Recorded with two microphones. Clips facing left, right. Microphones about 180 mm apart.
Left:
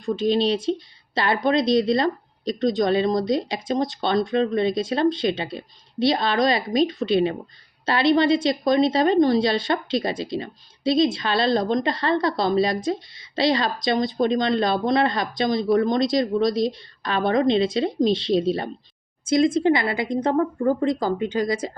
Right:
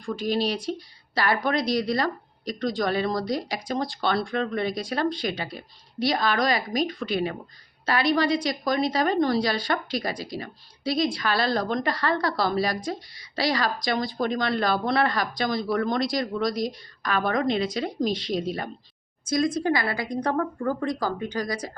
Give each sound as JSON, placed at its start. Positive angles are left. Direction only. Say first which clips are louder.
{"t": 0.0, "sound": "a woman's voice", "louder": "left 5 dB", "side_deg": 25}